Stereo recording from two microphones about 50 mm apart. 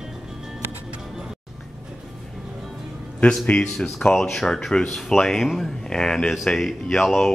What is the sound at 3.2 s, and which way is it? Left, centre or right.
Speech, left.